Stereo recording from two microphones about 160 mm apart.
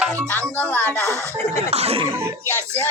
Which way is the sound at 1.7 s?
40° right (ahead or behind).